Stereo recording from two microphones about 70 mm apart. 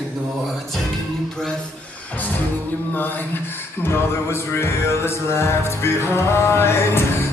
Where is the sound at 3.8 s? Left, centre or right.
Left.